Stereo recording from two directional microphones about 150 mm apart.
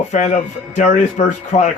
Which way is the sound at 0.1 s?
50° left (ahead or behind).